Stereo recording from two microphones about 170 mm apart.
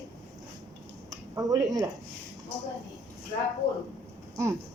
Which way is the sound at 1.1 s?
20° right (ahead or behind).